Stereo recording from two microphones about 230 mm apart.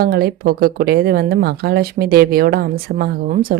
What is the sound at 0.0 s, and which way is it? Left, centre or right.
Speech, right.